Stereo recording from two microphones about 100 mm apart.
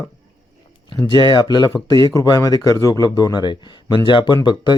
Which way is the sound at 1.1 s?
50° left (ahead or behind).